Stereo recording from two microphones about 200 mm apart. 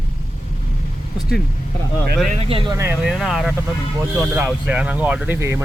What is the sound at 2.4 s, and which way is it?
Speech, 25° right (ahead or behind).